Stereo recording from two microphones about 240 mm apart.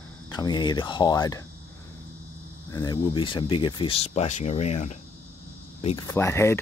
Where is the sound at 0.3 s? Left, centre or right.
Centre.